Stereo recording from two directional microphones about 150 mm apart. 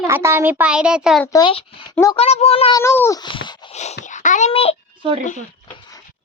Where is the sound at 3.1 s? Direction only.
30° left (ahead or behind).